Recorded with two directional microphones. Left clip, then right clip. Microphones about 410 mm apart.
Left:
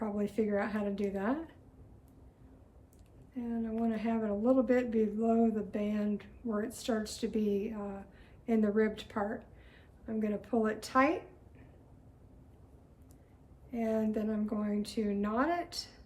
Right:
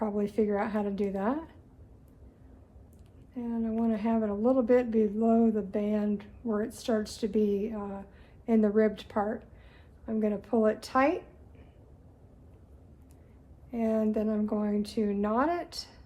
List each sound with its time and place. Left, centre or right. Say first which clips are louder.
0.0 s speech: right 5 dB; centre
3.3 s speech: right 4 dB; centre
13.7 s speech: right 4 dB; centre